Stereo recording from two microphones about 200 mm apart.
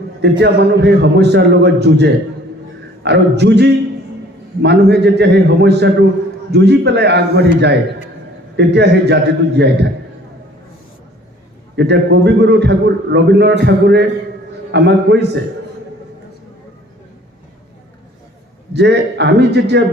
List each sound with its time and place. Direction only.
0.2 s a man's voice: 55° right (ahead or behind)
11.8 s a man's voice: 55° right (ahead or behind)
18.7 s a man's voice: 55° right (ahead or behind)